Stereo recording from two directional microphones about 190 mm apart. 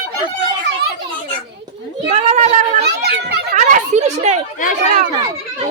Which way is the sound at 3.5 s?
35° right (ahead or behind).